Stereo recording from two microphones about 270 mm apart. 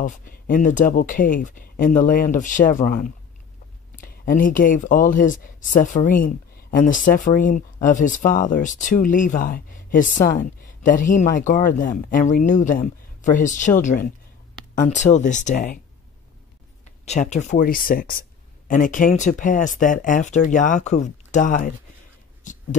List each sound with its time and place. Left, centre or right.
0.0 s speech: left
17.0 s speech: left
22.4 s a sound: left